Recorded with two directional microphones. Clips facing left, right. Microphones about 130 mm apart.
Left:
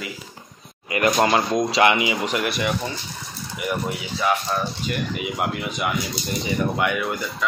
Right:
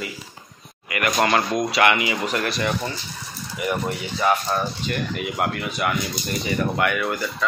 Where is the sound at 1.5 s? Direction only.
25° left (ahead or behind).